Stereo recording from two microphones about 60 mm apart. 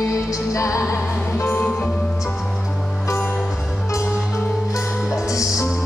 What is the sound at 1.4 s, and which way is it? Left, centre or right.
Music, left.